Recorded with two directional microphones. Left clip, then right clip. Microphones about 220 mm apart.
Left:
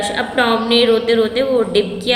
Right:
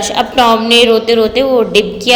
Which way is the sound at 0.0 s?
30° right (ahead or behind).